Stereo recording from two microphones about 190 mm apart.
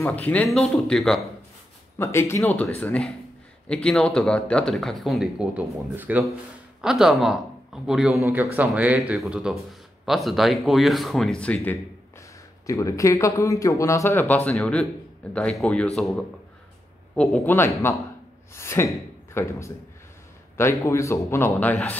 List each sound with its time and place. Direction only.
0.0 s speech: 10° left (ahead or behind)
2.0 s speech: 15° left (ahead or behind)
17.1 s speech: 5° left (ahead or behind)
20.8 s speech: 15° left (ahead or behind)